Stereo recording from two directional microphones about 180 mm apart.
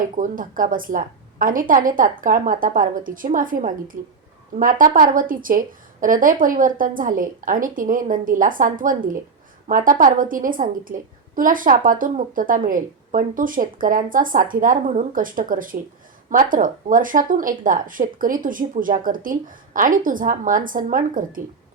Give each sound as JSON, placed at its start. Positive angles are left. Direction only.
{"t": 0.0, "sound": "a woman's voice", "side_deg": -50}